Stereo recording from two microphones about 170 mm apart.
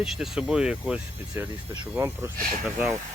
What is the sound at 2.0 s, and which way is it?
Speech, 15° right (ahead or behind).